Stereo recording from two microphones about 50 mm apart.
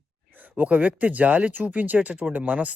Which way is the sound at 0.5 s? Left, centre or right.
Right.